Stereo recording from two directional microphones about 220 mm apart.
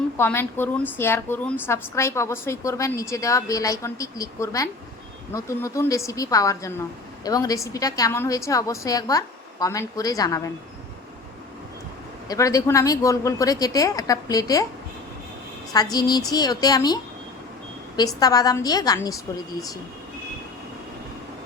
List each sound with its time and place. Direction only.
0.2 s a woman's voice: 10° left (ahead or behind)
12.3 s a woman's voice: 15° left (ahead or behind)
15.7 s a woman's voice: 15° left (ahead or behind)